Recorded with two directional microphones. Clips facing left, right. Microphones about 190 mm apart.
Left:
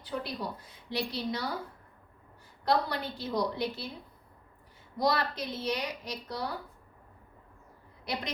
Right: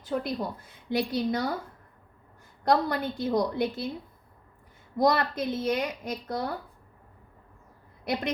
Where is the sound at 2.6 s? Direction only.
50° right (ahead or behind).